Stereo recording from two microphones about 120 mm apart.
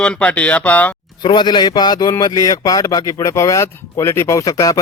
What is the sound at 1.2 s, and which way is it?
Speech, 40° left (ahead or behind).